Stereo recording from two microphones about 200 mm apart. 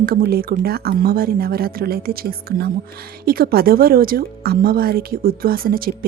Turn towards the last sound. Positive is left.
turn(degrees=-45)  # may be behind; listen again after turning